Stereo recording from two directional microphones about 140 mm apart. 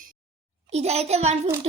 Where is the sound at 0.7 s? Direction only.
50° right (ahead or behind).